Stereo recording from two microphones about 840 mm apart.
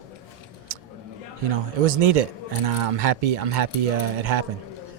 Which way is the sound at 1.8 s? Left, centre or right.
Right.